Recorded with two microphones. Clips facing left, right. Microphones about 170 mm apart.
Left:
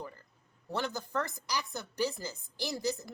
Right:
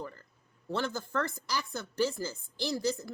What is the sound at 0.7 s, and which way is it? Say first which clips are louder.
Speech: right 2 dB; 15° left (ahead or behind).